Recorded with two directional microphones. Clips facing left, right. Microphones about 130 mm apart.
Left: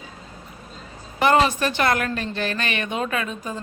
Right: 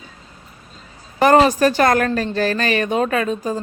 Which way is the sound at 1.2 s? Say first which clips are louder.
Right 6 dB; 40° right (ahead or behind).